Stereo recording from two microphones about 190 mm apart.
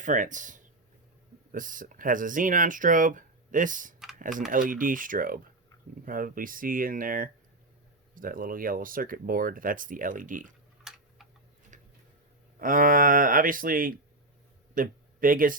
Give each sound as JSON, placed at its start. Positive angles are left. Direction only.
{"t": 0.0, "sound": "speech", "side_deg": -40}
{"t": 10.8, "sound": "tick-tock", "side_deg": 0}
{"t": 11.7, "sound": "a sound", "side_deg": -40}
{"t": 12.5, "sound": "speech", "side_deg": -45}